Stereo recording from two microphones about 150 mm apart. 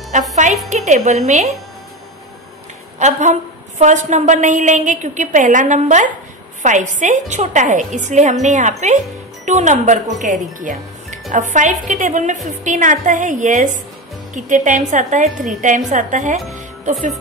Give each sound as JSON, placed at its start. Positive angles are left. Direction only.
{"t": 0.1, "sound": "a woman's voice", "side_deg": -55}
{"t": 3.0, "sound": "a woman's voice", "side_deg": -55}